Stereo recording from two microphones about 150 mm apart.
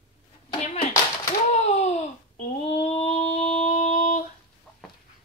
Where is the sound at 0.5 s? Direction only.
40° left (ahead or behind).